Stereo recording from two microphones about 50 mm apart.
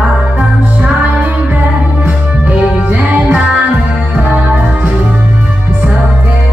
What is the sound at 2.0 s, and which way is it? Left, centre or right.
Music, right.